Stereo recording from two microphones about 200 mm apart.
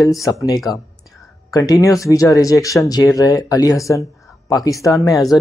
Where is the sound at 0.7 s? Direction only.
20° left (ahead or behind).